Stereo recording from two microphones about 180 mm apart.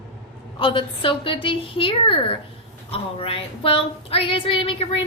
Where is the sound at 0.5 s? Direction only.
30° left (ahead or behind).